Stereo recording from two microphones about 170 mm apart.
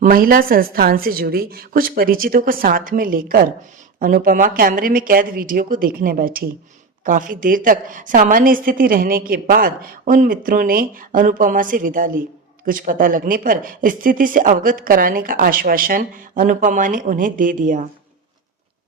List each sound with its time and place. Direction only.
0.0 s a woman's voice: 55° right (ahead or behind)